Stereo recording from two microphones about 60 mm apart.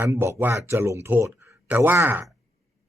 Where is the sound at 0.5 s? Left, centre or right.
Right.